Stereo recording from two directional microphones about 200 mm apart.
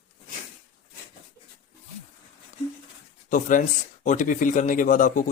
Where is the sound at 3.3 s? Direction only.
40° left (ahead or behind).